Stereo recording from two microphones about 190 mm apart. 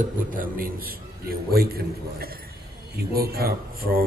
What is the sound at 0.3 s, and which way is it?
Speech, 45° right (ahead or behind).